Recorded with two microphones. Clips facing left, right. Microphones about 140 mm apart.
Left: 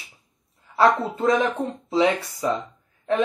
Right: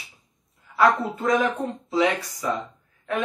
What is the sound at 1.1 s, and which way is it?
Speech, 25° left (ahead or behind).